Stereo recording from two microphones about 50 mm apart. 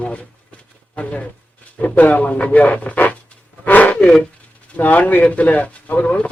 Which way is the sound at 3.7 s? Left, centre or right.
Left.